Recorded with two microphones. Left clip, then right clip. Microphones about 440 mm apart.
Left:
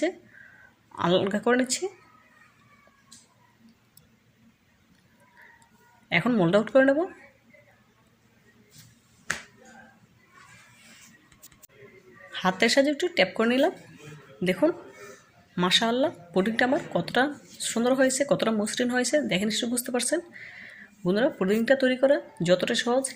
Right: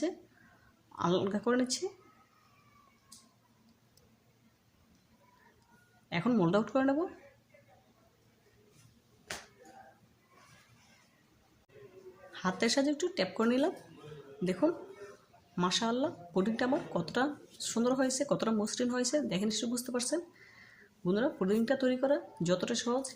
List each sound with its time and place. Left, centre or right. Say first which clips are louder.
0.9 s a woman's voice: left 8 dB; left
6.1 s a woman's voice: left 8 dB; left
12.3 s a woman's voice: left 9 dB; left
15.5 s a woman's voice: left 9 dB; left